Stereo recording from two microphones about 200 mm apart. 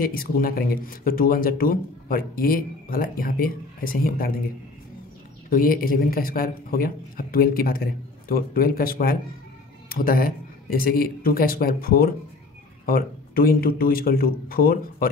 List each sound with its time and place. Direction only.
0.0 s speech: 45° left (ahead or behind)
5.5 s speech: 45° left (ahead or behind)